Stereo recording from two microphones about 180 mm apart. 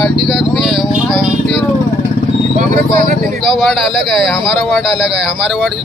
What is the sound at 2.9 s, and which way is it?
Speech, 55° right (ahead or behind).